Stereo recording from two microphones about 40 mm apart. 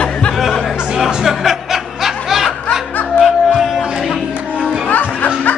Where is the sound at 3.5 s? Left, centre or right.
Centre.